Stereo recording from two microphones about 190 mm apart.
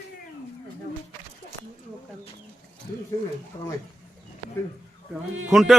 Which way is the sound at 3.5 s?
30° left (ahead or behind).